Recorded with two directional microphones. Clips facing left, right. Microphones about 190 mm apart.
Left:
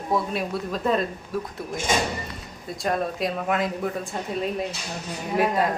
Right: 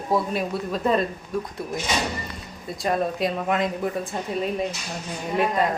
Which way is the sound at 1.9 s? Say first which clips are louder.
Left 3 dB; 50° left (ahead or behind).